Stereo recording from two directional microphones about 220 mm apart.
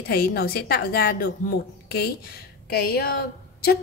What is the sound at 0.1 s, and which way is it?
A woman's voice, 45° left (ahead or behind).